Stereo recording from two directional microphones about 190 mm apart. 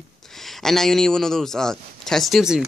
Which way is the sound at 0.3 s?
Centre (ahead or behind).